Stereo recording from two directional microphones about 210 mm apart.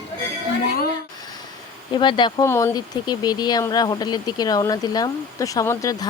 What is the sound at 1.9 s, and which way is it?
Speech, 20° left (ahead or behind).